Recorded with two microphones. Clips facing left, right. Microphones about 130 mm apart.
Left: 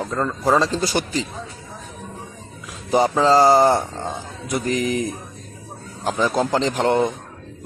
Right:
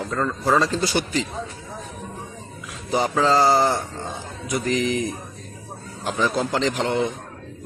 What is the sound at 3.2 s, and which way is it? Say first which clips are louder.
Speech: left 3 dB; 35° left (ahead or behind).